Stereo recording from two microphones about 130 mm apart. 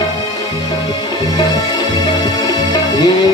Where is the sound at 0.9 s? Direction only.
30° left (ahead or behind).